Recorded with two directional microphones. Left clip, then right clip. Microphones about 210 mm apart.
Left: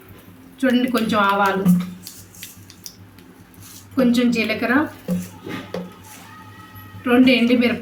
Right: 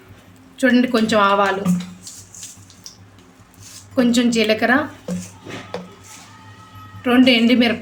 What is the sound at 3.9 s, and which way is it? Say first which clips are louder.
Speech: right 1 dB; 50° right (ahead or behind).